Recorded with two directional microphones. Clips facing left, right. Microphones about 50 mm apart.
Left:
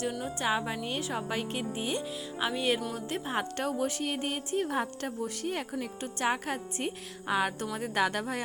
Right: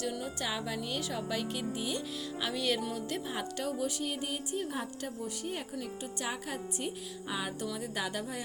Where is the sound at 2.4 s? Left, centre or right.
Left.